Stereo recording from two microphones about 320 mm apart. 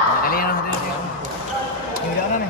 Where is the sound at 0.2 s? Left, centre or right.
Left.